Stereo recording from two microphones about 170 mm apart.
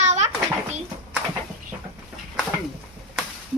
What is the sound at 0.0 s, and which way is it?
Children playing, 40° right (ahead or behind).